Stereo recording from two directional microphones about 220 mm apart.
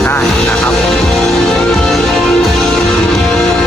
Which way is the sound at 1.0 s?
Centre (ahead or behind).